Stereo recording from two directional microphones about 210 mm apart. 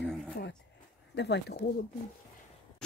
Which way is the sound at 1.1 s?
55° left (ahead or behind).